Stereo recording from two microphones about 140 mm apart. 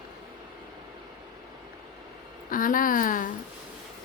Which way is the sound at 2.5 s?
75° left (ahead or behind).